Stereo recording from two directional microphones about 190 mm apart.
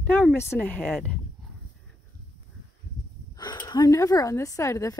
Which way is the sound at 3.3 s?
20° left (ahead or behind).